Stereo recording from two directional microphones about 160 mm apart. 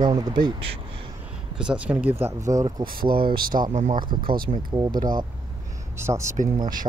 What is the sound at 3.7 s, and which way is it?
Speech, 50° right (ahead or behind).